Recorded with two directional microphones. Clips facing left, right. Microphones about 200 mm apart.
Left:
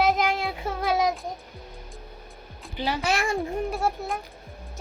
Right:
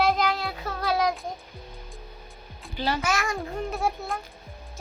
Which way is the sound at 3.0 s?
30° left (ahead or behind).